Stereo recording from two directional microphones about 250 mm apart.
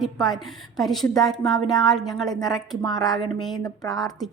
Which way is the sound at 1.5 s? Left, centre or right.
Centre.